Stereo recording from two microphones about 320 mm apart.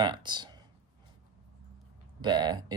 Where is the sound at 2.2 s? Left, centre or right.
Centre.